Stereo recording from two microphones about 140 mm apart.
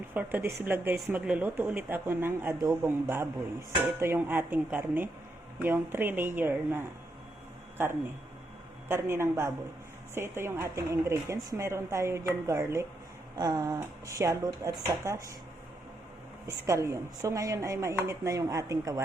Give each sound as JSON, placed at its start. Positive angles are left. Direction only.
{"t": 0.1, "sound": "speech", "side_deg": -15}
{"t": 16.5, "sound": "speech", "side_deg": -20}